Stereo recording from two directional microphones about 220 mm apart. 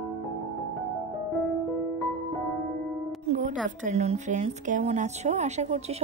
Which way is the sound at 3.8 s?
30° right (ahead or behind).